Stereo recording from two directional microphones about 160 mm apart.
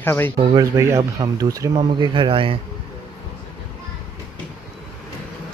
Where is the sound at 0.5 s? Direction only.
20° right (ahead or behind).